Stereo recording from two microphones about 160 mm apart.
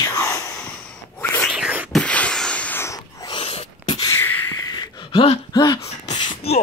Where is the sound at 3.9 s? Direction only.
20° left (ahead or behind).